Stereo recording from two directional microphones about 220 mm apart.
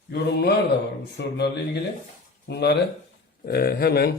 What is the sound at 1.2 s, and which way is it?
Speech, 50° left (ahead or behind).